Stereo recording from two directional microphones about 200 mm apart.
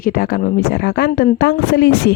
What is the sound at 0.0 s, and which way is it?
Speech, 45° left (ahead or behind).